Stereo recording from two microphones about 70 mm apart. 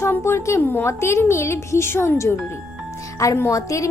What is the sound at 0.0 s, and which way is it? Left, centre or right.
Speech, left.